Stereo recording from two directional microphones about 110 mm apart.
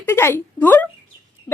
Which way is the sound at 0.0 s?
20° left (ahead or behind).